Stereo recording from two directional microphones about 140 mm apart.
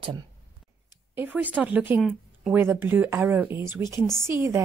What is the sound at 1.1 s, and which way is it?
Speech, 10° right (ahead or behind).